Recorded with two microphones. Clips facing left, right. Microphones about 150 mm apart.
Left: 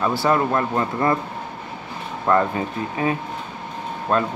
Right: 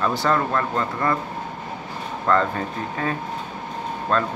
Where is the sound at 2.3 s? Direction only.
15° left (ahead or behind).